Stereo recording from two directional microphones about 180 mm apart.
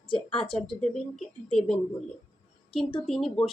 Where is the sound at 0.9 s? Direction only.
Centre (ahead or behind).